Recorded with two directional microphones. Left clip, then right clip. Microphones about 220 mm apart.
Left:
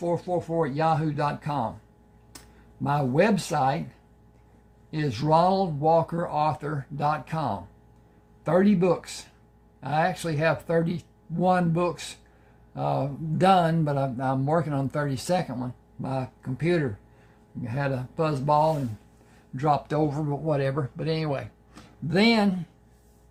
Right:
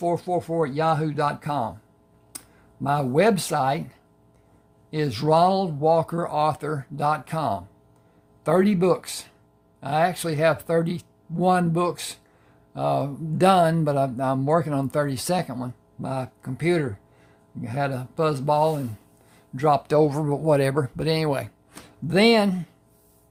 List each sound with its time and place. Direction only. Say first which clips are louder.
0.0 s speech: right 3 dB; 35° right (ahead or behind)
2.8 s speech: right 3 dB; 35° right (ahead or behind)
4.9 s speech: right 2 dB; 35° right (ahead or behind)